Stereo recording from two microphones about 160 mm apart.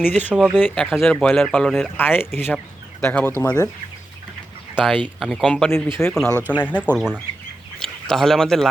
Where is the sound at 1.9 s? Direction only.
15° left (ahead or behind).